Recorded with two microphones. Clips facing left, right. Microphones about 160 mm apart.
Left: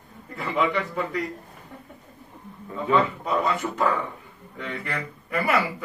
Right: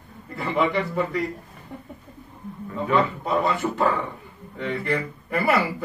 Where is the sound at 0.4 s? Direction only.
40° right (ahead or behind).